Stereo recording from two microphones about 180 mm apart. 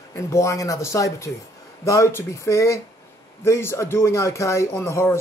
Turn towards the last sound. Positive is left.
turn(degrees=15)  # may be behind; listen again after turning